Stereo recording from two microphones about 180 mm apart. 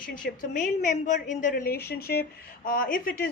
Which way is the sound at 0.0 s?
50° left (ahead or behind).